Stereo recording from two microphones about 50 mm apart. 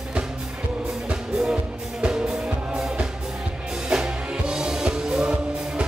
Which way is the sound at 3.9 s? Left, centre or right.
Centre.